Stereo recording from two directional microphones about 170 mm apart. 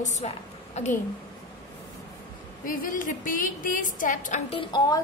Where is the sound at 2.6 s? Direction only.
55° left (ahead or behind); by 5.0 s 25° left (ahead or behind).